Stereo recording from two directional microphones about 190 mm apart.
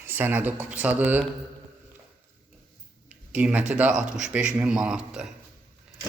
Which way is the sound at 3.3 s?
5° right (ahead or behind).